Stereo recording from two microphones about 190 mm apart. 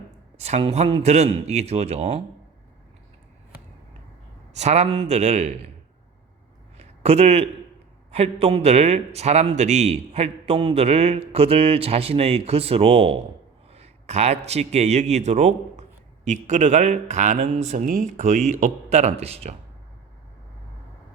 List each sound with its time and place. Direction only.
0.3 s a man's voice: 35° right (ahead or behind)
4.5 s a man's voice: 35° right (ahead or behind)
6.7 s a sound: 35° right (ahead or behind)
8.1 s a man's voice: 35° right (ahead or behind)